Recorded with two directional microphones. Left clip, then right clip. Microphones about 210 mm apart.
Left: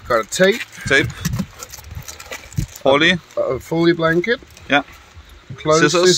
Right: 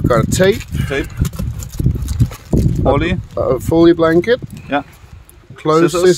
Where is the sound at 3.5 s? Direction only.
60° right (ahead or behind).